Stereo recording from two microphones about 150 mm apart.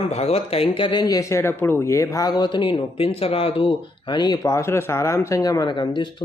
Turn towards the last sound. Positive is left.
turn(degrees=30)  # may be behind; listen again after turning